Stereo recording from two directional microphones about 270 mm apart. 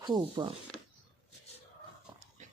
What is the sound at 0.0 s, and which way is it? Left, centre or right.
Speech, centre.